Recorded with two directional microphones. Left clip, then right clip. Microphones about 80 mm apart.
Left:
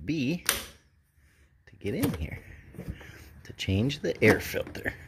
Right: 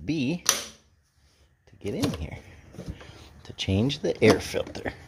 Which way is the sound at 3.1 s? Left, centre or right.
Centre.